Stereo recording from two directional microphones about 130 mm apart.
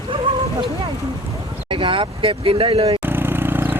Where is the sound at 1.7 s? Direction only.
40° right (ahead or behind).